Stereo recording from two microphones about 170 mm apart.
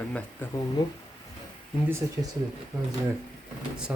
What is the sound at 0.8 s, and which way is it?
Speech, 25° left (ahead or behind).